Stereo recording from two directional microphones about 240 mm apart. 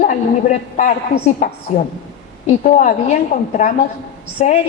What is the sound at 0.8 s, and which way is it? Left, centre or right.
A woman's voice, left.